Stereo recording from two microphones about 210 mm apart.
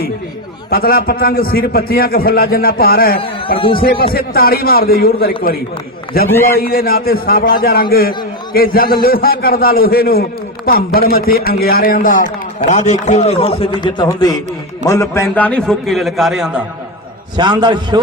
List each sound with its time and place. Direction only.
0.7 s a man's voice: 45° left (ahead or behind)
3.2 s a man's voice: 25° left (ahead or behind)
3.8 s a man's voice: 45° left (ahead or behind)
6.6 s a man's voice: 45° left (ahead or behind); by 16.6 s centre (ahead or behind)
17.3 s a man's voice: 20° right (ahead or behind)